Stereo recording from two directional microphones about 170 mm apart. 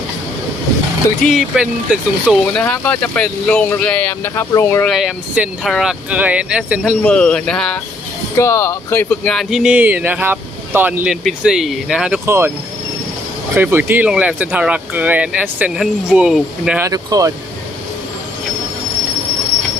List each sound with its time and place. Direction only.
1.2 s speech: centre (ahead or behind)
2.6 s speech: 10° left (ahead or behind)
4.9 s speech: centre (ahead or behind)
7.0 s speech: 5° left (ahead or behind)
8.4 s speech: 15° left (ahead or behind); by 12.2 s 5° right (ahead or behind)
12.2 s speech: 15° right (ahead or behind)
13.6 s speech: 10° right (ahead or behind)
16.8 s speech: 20° right (ahead or behind)